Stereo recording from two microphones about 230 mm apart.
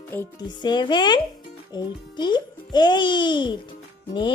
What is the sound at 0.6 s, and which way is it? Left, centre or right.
Speech, centre.